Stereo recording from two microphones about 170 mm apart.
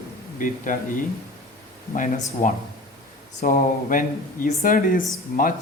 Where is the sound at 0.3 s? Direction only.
50° left (ahead or behind).